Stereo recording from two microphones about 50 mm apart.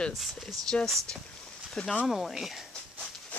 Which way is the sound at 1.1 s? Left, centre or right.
Left.